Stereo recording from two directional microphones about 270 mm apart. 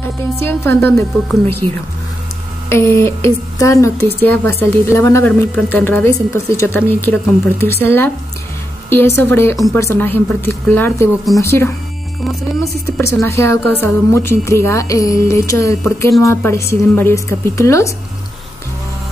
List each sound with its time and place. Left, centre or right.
0.5 s a woman's voice: centre
1.6 s a woman's voice: centre
2.7 s a woman's voice: centre
12.8 s a woman's voice: centre